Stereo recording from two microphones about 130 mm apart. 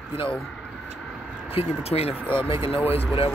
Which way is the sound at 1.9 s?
50° left (ahead or behind).